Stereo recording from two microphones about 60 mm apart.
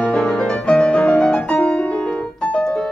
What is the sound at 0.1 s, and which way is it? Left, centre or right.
Music, centre.